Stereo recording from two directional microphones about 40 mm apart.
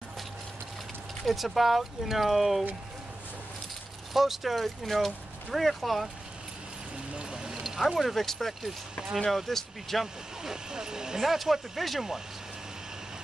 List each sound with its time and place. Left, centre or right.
1.2 s speech: centre
4.1 s speech: centre
7.2 s a sound: centre
7.6 s speech: centre
10.4 s speech: centre
11.2 s speech: centre